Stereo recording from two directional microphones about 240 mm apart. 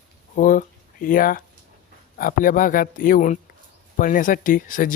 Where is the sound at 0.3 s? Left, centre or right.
Left.